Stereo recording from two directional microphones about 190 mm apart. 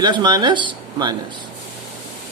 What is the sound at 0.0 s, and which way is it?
Speech, 20° right (ahead or behind).